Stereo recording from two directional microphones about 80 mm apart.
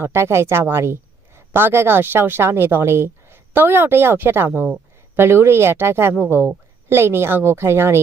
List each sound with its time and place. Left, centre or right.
0.0 s a woman's voice: right